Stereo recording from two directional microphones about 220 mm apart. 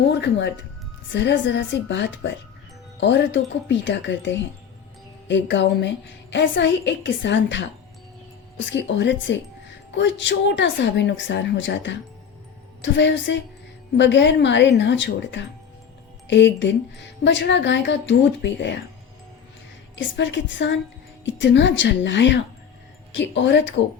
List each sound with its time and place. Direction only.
0.1 s a woman's voice: 50° left (ahead or behind)
20.0 s a woman's voice: 55° left (ahead or behind)